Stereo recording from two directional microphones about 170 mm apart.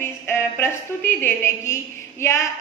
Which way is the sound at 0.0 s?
15° left (ahead or behind).